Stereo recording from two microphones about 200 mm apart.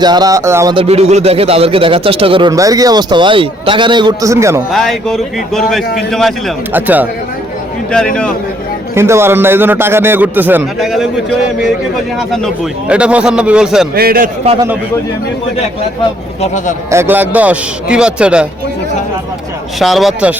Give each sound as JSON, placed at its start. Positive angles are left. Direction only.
{"t": 0.0, "sound": "speech", "side_deg": -20}
{"t": 4.7, "sound": "speech", "side_deg": 0}
{"t": 6.7, "sound": "a man's voice", "side_deg": -10}
{"t": 7.9, "sound": "speech", "side_deg": 5}
{"t": 9.0, "sound": "a man's voice", "side_deg": -15}
{"t": 12.9, "sound": "speech", "side_deg": -5}
{"t": 13.9, "sound": "a man's voice", "side_deg": -50}
{"t": 16.9, "sound": "a man's voice", "side_deg": -10}
{"t": 19.8, "sound": "speech", "side_deg": 0}